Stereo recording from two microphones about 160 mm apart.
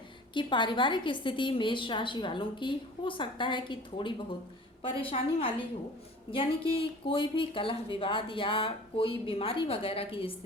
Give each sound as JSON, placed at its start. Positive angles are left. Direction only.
{"t": 0.3, "sound": "speech", "side_deg": 30}